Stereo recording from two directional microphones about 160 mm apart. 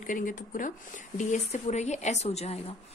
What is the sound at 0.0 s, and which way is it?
A woman's voice, 55° left (ahead or behind).